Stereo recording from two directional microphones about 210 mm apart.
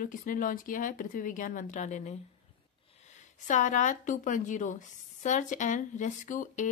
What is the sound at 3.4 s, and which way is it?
A woman's voice, 35° left (ahead or behind).